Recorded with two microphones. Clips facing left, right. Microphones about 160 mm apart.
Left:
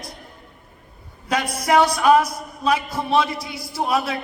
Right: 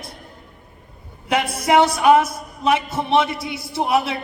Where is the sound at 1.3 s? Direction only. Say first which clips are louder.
Right 2 dB; 25° right (ahead or behind).